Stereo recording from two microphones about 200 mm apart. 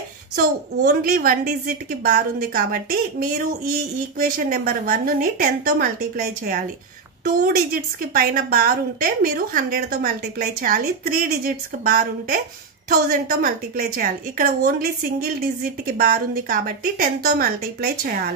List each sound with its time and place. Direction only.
0.4 s a woman's voice: 45° right (ahead or behind)